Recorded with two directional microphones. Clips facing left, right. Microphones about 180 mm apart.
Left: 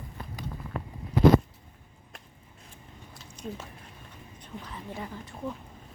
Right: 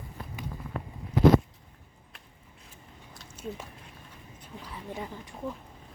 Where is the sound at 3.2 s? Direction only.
5° right (ahead or behind).